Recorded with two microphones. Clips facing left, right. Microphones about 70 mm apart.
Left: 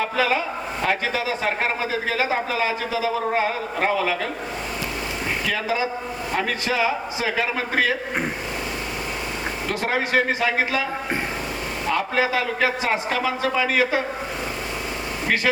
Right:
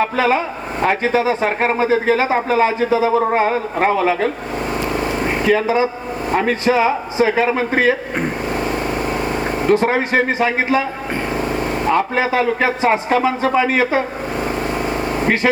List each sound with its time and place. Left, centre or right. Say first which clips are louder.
0.0 s a man's voice: right 5 dB; right
9.6 s a man's voice: right 9 dB; right
11.9 s speech: right 4 dB; right